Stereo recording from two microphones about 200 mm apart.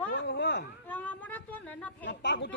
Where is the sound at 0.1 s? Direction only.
55° left (ahead or behind).